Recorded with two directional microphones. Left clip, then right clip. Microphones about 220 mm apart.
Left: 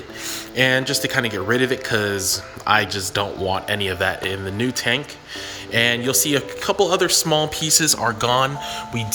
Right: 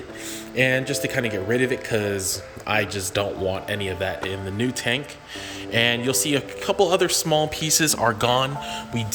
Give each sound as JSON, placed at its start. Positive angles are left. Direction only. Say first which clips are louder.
{"t": 0.5, "sound": "speech", "louder": "left 3 dB", "side_deg": 0}